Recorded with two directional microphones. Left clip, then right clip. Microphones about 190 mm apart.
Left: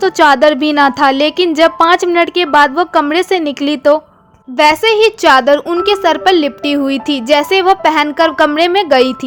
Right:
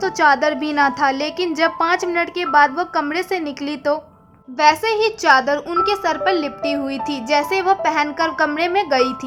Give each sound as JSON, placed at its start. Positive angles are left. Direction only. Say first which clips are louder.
{"t": 0.0, "sound": "a woman's voice", "louder": "left 7 dB", "side_deg": 30}